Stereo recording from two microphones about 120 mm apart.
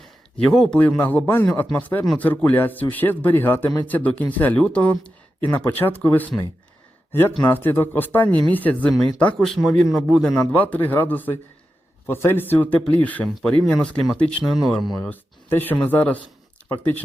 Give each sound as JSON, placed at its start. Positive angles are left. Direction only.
{"t": 0.4, "sound": "speech", "side_deg": 5}
{"t": 14.9, "sound": "speech", "side_deg": 15}